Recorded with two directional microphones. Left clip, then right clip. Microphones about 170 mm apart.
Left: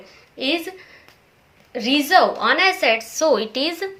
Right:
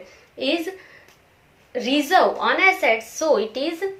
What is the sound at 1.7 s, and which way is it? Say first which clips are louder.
A woman's voice: left 2 dB; 30° left (ahead or behind).